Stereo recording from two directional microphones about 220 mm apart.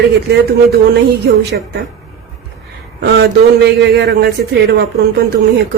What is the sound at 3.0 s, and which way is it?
A man's voice, 50° right (ahead or behind).